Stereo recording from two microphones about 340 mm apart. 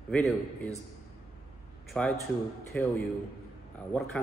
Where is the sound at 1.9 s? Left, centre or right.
Centre.